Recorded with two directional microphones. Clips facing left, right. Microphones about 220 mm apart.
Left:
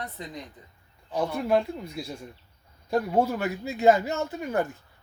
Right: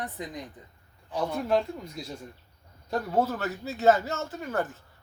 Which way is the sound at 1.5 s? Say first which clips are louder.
Left 2 dB; 10° left (ahead or behind).